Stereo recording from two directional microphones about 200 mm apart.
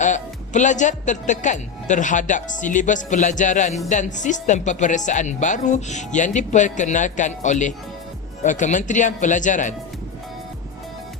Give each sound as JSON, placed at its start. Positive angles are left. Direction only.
{"t": 0.0, "sound": "speech", "side_deg": 40}